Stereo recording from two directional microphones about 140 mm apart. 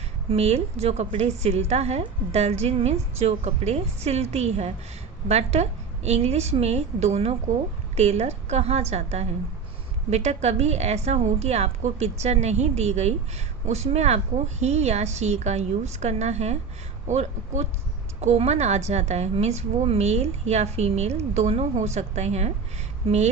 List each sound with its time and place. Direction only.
0.3 s a woman's voice: 50° right (ahead or behind)